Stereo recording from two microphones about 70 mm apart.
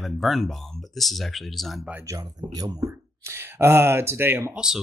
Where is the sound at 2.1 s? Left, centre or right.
Right.